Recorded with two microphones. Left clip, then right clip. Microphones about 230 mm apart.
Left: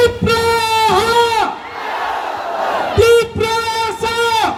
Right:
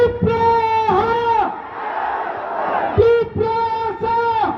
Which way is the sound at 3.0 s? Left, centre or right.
Centre.